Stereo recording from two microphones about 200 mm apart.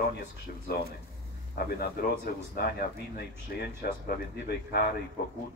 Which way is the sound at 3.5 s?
50° left (ahead or behind).